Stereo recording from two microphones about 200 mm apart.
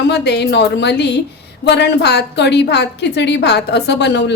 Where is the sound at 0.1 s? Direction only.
55° left (ahead or behind).